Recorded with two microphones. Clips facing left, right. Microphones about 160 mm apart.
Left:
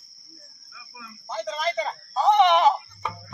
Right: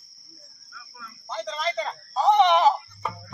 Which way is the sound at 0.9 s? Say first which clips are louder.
Left 1 dB; 5° left (ahead or behind).